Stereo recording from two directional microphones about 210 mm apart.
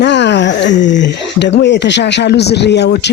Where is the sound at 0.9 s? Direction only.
55° left (ahead or behind).